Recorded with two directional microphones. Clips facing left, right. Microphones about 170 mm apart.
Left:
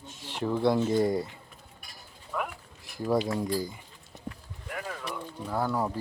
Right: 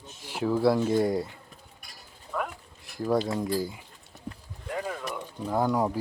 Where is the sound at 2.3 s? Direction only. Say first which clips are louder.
Right 1 dB; centre (ahead or behind).